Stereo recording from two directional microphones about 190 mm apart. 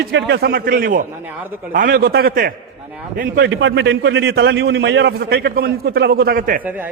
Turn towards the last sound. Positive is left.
turn(degrees=-10)  # may be behind; listen again after turning